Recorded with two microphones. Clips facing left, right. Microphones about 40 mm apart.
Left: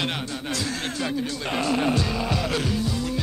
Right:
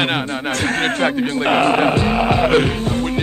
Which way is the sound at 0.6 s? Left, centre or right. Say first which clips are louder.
Right 11 dB; right.